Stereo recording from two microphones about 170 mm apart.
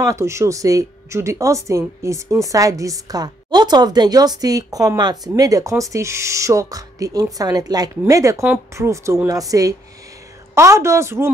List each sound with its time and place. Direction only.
0.0 s a woman's voice: 15° right (ahead or behind)